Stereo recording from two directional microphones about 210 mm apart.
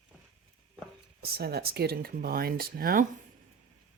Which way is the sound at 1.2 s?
50° right (ahead or behind).